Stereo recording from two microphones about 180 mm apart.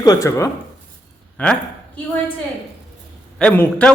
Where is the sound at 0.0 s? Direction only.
20° left (ahead or behind).